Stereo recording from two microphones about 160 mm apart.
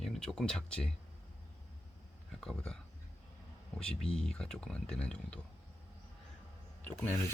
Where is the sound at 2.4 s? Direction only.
5° left (ahead or behind).